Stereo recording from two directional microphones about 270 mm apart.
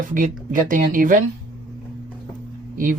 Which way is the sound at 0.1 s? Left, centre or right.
Right.